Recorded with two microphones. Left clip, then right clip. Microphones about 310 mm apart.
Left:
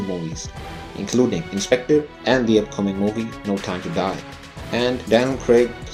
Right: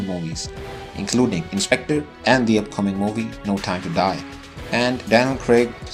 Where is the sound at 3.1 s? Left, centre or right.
Centre.